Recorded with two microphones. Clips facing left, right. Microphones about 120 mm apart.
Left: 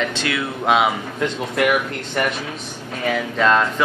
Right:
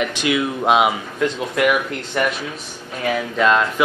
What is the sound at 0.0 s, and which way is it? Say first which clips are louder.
Speech: right 3 dB; 15° right (ahead or behind).